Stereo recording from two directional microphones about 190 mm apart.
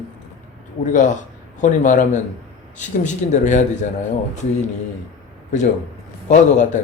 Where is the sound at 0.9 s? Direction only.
40° left (ahead or behind).